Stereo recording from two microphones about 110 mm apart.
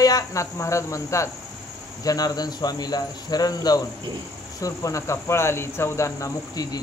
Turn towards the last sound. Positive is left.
turn(degrees=30)  # may be behind; listen again after turning